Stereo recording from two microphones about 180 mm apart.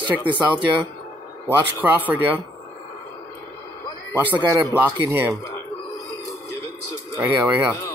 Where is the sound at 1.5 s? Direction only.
10° right (ahead or behind).